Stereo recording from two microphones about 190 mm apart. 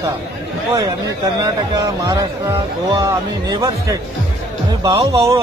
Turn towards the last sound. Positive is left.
turn(degrees=-15)  # may be behind; listen again after turning